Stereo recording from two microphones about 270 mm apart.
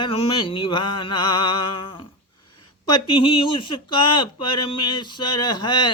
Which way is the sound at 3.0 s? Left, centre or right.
Centre.